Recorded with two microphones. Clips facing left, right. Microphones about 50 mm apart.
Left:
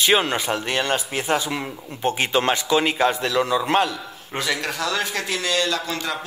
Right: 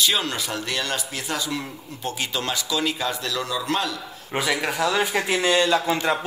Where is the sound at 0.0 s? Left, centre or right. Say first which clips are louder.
Left 4 dB; left.